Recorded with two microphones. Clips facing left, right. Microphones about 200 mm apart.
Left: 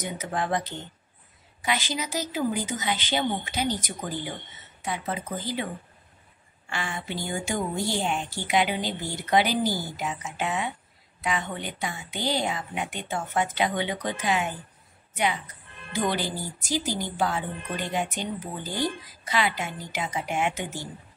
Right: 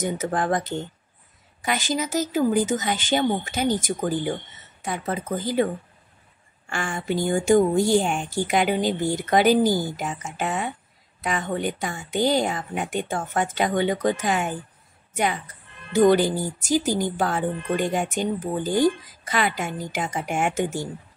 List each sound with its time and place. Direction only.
0.0 s speech: 50° right (ahead or behind)
6.7 s speech: 50° right (ahead or behind)
15.9 s speech: 45° right (ahead or behind)